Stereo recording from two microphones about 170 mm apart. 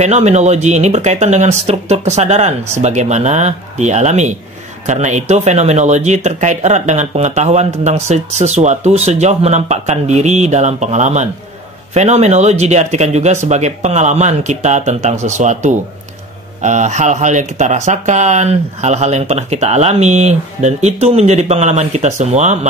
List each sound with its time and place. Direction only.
0.0 s speech: 40° right (ahead or behind)